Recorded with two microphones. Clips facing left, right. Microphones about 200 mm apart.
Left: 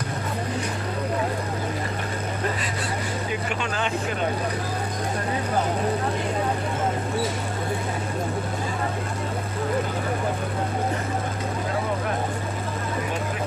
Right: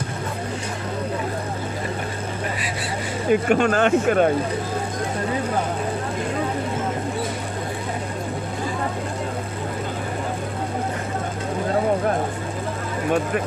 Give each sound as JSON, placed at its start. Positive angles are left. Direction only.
{"t": 3.2, "sound": "speech", "side_deg": -50}